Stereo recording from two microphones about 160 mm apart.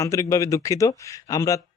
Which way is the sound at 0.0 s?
20° left (ahead or behind).